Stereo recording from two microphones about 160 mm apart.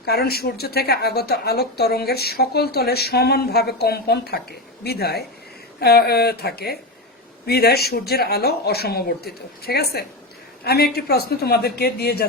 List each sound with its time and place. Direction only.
0.0 s speech: 75° left (ahead or behind)